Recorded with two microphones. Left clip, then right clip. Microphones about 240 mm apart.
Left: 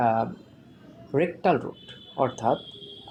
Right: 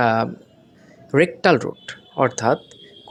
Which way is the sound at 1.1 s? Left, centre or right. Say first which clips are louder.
Right 7 dB; right.